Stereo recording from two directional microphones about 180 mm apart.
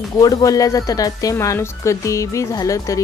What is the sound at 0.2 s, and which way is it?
Speech, 20° left (ahead or behind).